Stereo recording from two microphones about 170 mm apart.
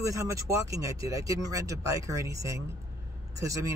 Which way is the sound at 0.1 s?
20° right (ahead or behind).